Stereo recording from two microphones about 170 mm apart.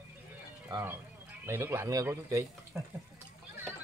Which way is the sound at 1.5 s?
15° right (ahead or behind).